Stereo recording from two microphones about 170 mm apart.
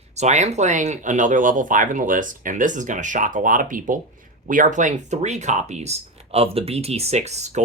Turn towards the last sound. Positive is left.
turn(degrees=-45)  # may be behind; listen again after turning